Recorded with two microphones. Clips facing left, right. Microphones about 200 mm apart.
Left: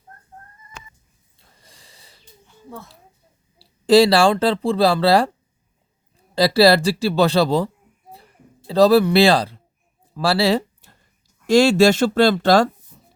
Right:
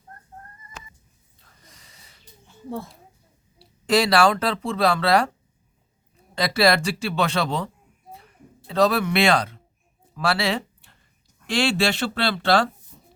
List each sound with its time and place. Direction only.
1.6 s snort: 30° left (ahead or behind)
3.6 s speech: 30° left (ahead or behind)
6.3 s speech: 35° left (ahead or behind)
8.1 s a sound: 35° left (ahead or behind)
10.2 s speech: 35° left (ahead or behind)